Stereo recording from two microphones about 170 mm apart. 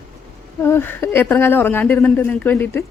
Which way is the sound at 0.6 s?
10° left (ahead or behind).